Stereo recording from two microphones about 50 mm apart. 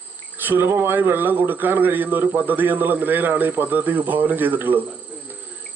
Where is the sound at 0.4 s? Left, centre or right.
Right.